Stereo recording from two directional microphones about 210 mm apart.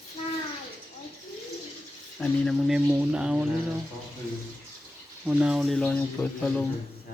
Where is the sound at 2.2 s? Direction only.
Centre (ahead or behind).